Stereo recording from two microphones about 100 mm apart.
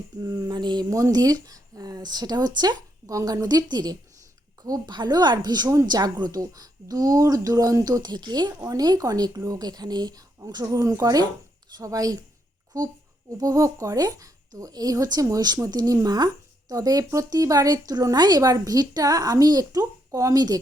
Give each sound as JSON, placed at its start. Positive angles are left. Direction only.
{"t": 0.2, "sound": "speech", "side_deg": -35}